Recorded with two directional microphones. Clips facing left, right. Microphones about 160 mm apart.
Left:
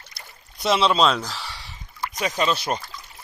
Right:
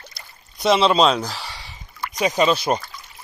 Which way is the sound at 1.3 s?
Centre (ahead or behind).